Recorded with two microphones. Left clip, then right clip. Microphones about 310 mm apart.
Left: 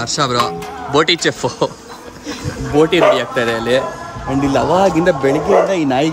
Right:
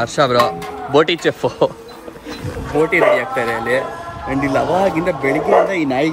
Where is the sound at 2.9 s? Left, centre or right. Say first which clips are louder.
Left 1 dB; centre.